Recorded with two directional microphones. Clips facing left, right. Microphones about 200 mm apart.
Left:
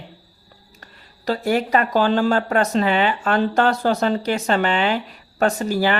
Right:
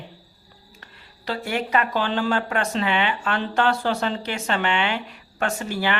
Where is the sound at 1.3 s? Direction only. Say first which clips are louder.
Left 6 dB; 40° left (ahead or behind).